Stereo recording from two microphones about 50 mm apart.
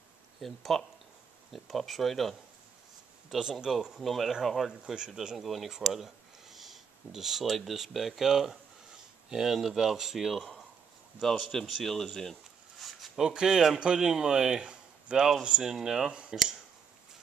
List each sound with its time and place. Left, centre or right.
0.4 s speech: centre
3.3 s speech: centre
4.0 s speech: centre
4.9 s speech: centre
11.8 s a sound: centre
13.3 s speech: centre